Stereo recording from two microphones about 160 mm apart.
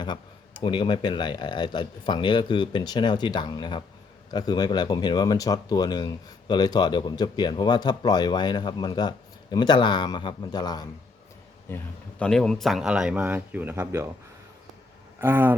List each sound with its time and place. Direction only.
0.6 s speech: 30° left (ahead or behind)
11.7 s a man's voice: 10° left (ahead or behind); by 14.1 s 15° right (ahead or behind)
15.2 s speech: 15° right (ahead or behind)